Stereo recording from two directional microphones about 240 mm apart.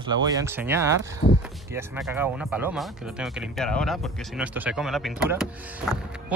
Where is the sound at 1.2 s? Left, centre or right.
Left.